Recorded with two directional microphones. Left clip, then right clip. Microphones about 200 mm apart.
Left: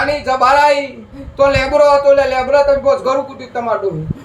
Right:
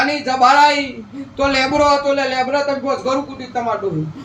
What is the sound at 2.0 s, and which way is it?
Speech, 15° left (ahead or behind).